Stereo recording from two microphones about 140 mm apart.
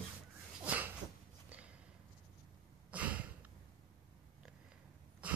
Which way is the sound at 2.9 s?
10° right (ahead or behind).